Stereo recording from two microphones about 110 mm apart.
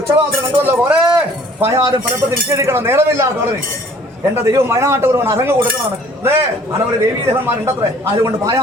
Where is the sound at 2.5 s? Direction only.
25° right (ahead or behind).